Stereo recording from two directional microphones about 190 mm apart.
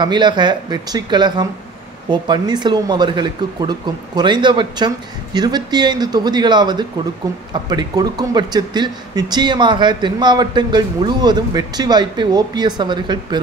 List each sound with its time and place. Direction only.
0.0 s speech: 25° right (ahead or behind)